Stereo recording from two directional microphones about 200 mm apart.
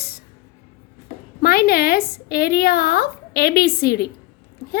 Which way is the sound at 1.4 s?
50° left (ahead or behind).